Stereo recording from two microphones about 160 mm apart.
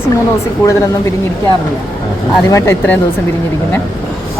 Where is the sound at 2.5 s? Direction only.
15° left (ahead or behind).